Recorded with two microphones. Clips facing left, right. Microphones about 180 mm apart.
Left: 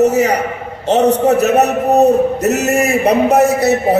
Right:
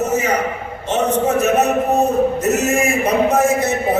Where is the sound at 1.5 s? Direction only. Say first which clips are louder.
Left 3 dB; 35° left (ahead or behind).